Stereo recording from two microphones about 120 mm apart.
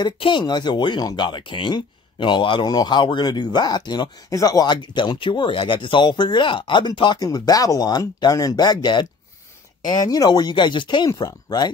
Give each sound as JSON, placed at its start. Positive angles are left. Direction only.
{"t": 0.0, "sound": "speech", "side_deg": 40}
{"t": 10.0, "sound": "speech", "side_deg": 35}